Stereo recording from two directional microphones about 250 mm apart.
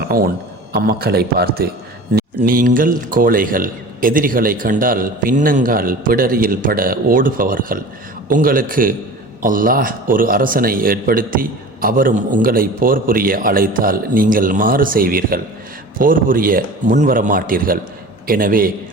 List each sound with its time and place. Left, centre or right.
0.1 s a man's voice: right